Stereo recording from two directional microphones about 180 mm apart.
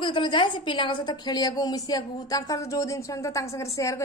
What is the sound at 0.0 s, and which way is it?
A woman's voice, 25° left (ahead or behind).